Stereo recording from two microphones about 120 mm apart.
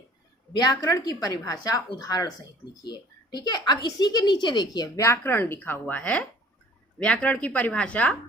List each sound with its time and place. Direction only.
0.5 s a woman's voice: 35° left (ahead or behind); by 8.1 s 10° left (ahead or behind)